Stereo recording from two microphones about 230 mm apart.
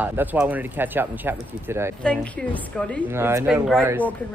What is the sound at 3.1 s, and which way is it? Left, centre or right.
Speech, centre.